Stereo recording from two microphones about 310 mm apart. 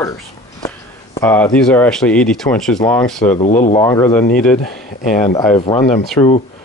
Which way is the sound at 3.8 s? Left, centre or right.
Centre.